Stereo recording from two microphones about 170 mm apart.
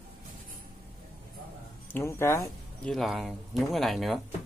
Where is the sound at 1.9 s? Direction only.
15° left (ahead or behind).